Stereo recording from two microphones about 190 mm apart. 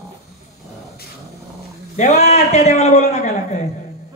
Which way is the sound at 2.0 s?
35° left (ahead or behind).